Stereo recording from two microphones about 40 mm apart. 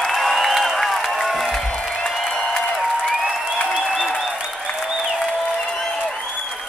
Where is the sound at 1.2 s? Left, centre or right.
Centre.